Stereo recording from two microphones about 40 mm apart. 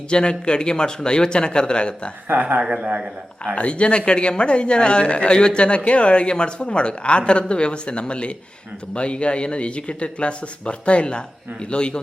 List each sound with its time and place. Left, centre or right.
0.1 s speech: left
2.3 s speech: right
2.6 s speech: right
3.5 s speech: left